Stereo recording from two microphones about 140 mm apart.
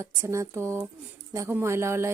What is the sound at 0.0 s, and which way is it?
A woman's voice, 20° right (ahead or behind).